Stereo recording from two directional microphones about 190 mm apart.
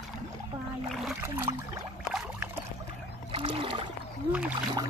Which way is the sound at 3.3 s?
30° right (ahead or behind).